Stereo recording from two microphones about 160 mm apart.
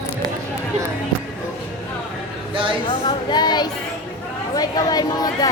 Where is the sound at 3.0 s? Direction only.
25° left (ahead or behind).